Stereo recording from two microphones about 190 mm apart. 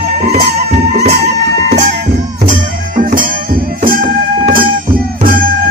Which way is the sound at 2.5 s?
45° right (ahead or behind).